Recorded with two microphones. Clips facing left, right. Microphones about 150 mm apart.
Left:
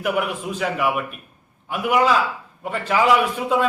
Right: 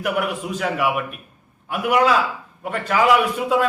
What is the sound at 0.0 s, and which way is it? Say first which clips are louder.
A man's voice: even; centre (ahead or behind).